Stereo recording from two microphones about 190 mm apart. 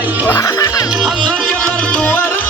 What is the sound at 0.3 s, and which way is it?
Music, 20° left (ahead or behind).